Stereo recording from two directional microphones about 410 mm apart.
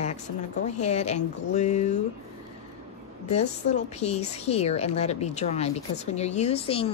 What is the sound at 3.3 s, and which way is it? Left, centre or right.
A woman's voice, centre.